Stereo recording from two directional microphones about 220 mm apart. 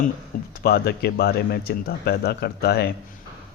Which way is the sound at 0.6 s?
45° left (ahead or behind).